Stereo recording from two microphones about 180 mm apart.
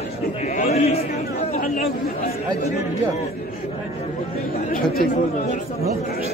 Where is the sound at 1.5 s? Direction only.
45° left (ahead or behind).